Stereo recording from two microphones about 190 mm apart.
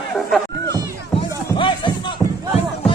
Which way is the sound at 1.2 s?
25° left (ahead or behind).